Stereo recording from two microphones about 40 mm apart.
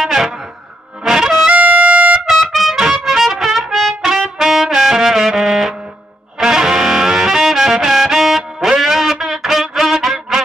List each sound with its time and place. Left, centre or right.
0.0 s music: centre
1.5 s music: right
2.3 s trumpet: centre
2.8 s music: centre